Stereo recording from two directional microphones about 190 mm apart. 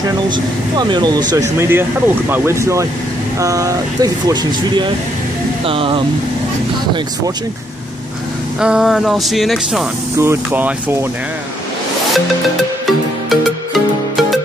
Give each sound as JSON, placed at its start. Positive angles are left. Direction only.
{"t": 0.7, "sound": "speech", "side_deg": -25}
{"t": 8.5, "sound": "speech", "side_deg": -5}
{"t": 10.1, "sound": "speech", "side_deg": -15}
{"t": 12.8, "sound": "music", "side_deg": 0}